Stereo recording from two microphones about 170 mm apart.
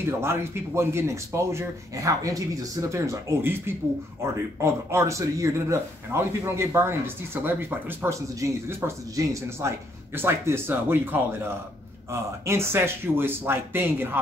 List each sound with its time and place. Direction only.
0.0 s speech: 15° right (ahead or behind)